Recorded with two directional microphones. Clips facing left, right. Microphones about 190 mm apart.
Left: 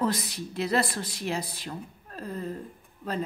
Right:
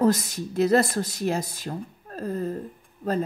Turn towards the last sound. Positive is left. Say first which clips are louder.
# right 6 dB
turn(degrees=-45)  # may be behind; listen again after turning